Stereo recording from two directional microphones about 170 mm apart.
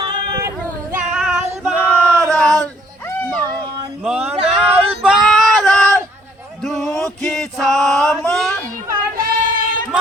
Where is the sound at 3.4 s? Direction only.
30° right (ahead or behind).